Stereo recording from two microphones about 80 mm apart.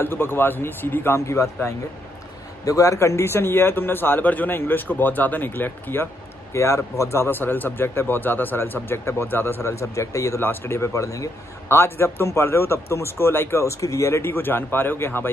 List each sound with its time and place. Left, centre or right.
0.0 s speech: left
10.4 s speech: left
11.7 s speech: left